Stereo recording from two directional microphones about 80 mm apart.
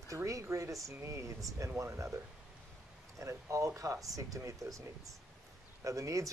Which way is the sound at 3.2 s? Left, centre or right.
Right.